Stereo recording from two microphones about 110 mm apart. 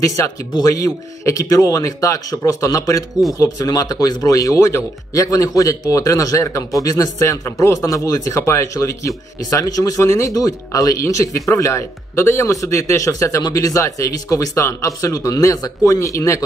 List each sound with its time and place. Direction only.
0.0 s speech: 30° left (ahead or behind)